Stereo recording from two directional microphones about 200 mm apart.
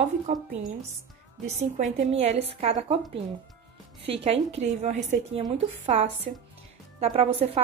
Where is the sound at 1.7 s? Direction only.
35° right (ahead or behind).